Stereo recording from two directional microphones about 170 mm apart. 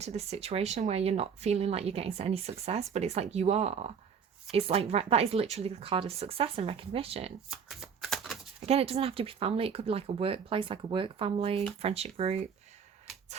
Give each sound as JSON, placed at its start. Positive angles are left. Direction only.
{"t": 0.0, "sound": "speech", "side_deg": -35}
{"t": 7.5, "sound": "shuffling cards", "side_deg": 0}
{"t": 8.6, "sound": "speech", "side_deg": -35}